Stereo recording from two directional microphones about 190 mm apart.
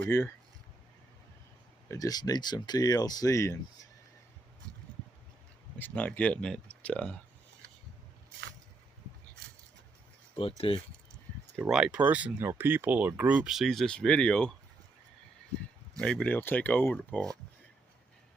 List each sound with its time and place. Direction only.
1.9 s speech: 20° left (ahead or behind)
5.8 s speech: 10° left (ahead or behind)
10.6 s speech: 30° left (ahead or behind)
11.6 s speech: 5° right (ahead or behind)
16.0 s speech: 5° left (ahead or behind)